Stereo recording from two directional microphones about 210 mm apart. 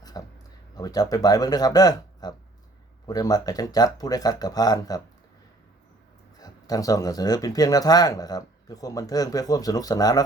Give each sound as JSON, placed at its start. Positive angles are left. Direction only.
{"t": 0.1, "sound": "a sound", "side_deg": 20}
{"t": 0.8, "sound": "speech", "side_deg": 20}
{"t": 6.4, "sound": "speech", "side_deg": 15}